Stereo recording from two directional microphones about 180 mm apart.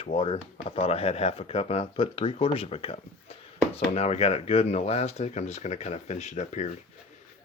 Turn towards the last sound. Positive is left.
turn(degrees=40)  # may be behind; listen again after turning